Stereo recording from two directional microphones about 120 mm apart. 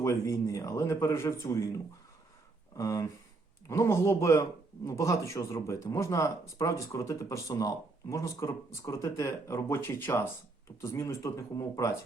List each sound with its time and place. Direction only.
0.0 s speech: 25° left (ahead or behind)
2.7 s speech: 25° left (ahead or behind)